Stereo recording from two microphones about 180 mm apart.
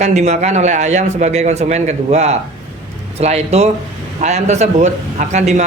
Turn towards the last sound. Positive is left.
turn(degrees=-40)  # may be behind; listen again after turning